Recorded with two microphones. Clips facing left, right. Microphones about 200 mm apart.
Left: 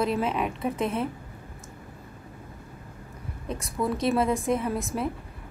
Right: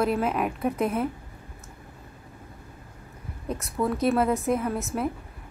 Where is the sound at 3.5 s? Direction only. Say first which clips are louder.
Right 1 dB; 30° left (ahead or behind).